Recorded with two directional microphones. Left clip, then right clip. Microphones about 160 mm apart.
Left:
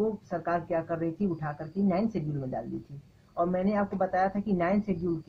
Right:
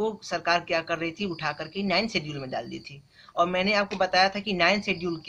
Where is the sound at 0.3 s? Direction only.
30° right (ahead or behind).